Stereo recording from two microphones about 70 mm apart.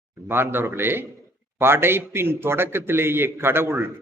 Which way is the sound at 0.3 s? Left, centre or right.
Right.